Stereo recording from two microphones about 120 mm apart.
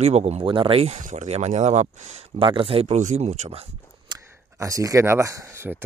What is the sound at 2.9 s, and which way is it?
Speech, 75° right (ahead or behind).